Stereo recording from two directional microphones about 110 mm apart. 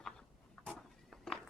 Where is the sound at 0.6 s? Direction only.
5° left (ahead or behind).